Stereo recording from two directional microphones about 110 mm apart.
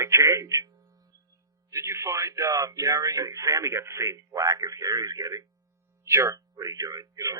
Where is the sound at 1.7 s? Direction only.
25° right (ahead or behind).